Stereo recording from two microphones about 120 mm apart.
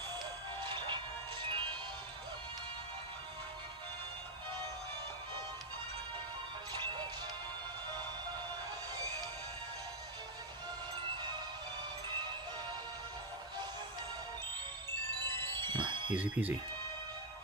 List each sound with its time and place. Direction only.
0.7 s music: 40° right (ahead or behind)
6.8 s music: 35° right (ahead or behind)
15.2 s music: 20° left (ahead or behind)
15.5 s music: 40° right (ahead or behind)
16.2 s speech: 15° right (ahead or behind)